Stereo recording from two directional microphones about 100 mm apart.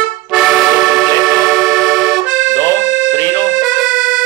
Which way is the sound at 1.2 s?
Centre (ahead or behind).